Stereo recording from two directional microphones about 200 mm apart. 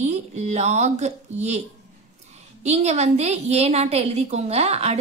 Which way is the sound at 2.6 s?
35° right (ahead or behind).